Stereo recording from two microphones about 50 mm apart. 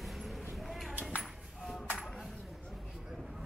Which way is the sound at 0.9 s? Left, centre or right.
Right.